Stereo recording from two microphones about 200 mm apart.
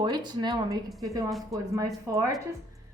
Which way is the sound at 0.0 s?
20° right (ahead or behind).